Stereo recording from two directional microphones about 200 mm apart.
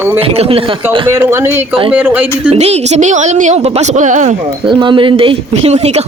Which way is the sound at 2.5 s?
35° right (ahead or behind).